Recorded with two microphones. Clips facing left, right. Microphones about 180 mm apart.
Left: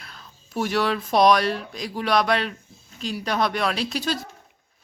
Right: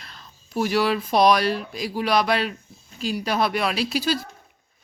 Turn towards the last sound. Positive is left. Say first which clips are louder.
# right 2 dB
turn(degrees=-5)  # may be behind; listen again after turning